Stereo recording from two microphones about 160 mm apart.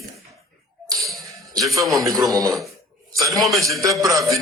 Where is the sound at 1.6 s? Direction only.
Centre (ahead or behind).